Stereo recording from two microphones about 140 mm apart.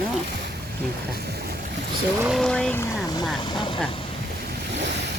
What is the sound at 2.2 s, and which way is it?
Speech, centre (ahead or behind).